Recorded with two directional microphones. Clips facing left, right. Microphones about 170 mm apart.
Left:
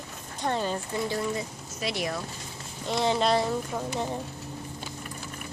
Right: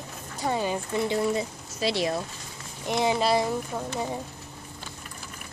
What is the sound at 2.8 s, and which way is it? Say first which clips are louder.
Speech: right 1 dB; 15° right (ahead or behind).